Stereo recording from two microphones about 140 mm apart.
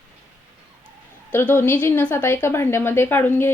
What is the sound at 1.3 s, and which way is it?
A woman's voice, 15° left (ahead or behind).